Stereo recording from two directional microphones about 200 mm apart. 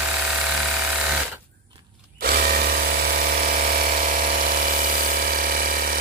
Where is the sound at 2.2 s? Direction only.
45° right (ahead or behind).